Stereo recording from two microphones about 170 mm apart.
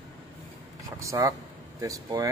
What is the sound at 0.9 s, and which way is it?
Speech, 15° right (ahead or behind).